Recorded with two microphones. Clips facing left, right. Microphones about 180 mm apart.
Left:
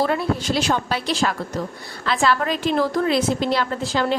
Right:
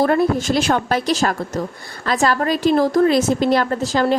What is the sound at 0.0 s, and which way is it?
A woman's voice, 50° right (ahead or behind).